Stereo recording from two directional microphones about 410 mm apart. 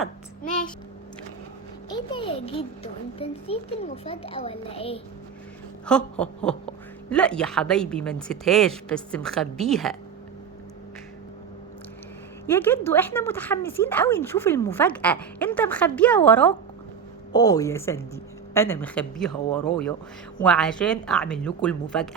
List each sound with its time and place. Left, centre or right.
1.9 s a child's voice: centre
5.8 s speech: centre
12.5 s a child's voice: centre